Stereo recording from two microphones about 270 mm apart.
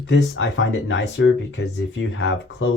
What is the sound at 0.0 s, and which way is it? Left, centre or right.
Speech, left.